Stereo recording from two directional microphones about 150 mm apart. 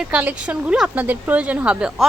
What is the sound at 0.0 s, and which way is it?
Speech, 10° right (ahead or behind).